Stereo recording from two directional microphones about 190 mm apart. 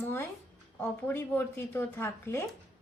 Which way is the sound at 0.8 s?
10° left (ahead or behind).